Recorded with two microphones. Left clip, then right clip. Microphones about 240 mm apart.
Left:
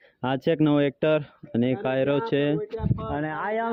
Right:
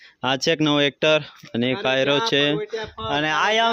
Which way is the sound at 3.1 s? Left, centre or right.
Centre.